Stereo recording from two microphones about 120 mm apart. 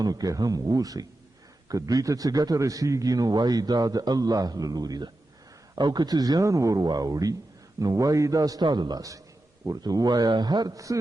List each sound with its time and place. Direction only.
0.0 s a man's voice: 30° right (ahead or behind)